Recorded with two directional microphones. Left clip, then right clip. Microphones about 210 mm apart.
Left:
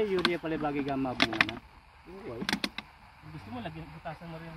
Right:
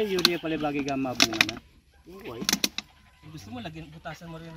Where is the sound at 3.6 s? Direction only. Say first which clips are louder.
Right 1 dB; 5° right (ahead or behind).